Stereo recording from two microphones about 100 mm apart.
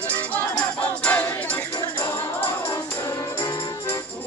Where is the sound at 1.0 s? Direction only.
15° left (ahead or behind).